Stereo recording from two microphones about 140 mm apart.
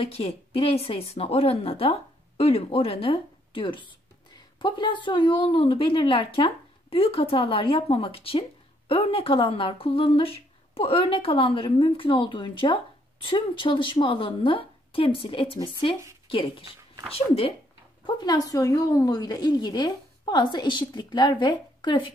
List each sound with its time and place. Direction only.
0.0 s a woman's voice: 45° left (ahead or behind)
18.0 s a woman's voice: 30° left (ahead or behind)